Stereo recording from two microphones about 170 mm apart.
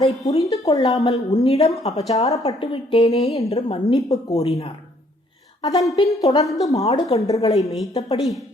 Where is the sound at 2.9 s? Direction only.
35° left (ahead or behind).